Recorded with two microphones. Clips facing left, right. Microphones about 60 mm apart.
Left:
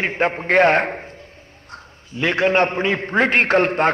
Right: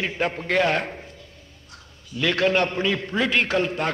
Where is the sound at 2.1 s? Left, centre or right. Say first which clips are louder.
Left 3 dB; left.